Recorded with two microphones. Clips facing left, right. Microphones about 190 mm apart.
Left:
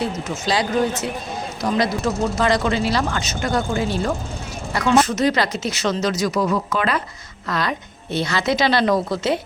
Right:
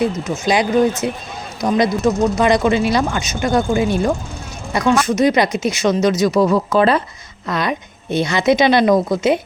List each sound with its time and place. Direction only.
0.0 s a woman's voice: 20° right (ahead or behind)
5.0 s a woman's voice: 15° right (ahead or behind); by 7.0 s 30° right (ahead or behind)
7.4 s a woman's voice: 20° right (ahead or behind)